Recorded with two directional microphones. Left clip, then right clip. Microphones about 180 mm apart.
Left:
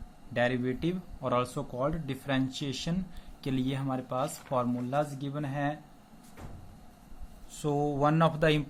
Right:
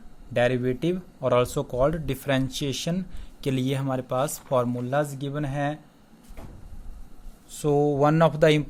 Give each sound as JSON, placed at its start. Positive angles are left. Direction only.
{"t": 0.3, "sound": "speech", "side_deg": -40}
{"t": 7.5, "sound": "speech", "side_deg": -30}